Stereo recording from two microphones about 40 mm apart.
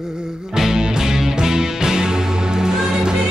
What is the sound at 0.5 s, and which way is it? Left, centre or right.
Music, centre.